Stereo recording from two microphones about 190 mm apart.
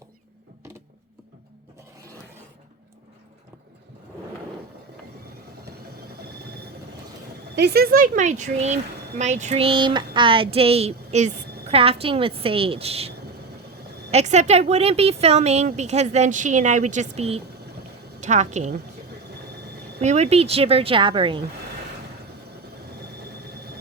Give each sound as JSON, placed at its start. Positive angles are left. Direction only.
{"t": 7.5, "sound": "a woman's voice", "side_deg": -60}
{"t": 20.0, "sound": "speech", "side_deg": -35}